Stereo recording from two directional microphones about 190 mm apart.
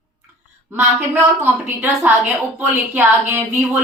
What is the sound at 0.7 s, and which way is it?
A woman's voice, 10° right (ahead or behind).